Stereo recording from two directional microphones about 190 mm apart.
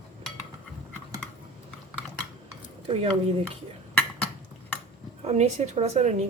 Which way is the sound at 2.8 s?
30° right (ahead or behind).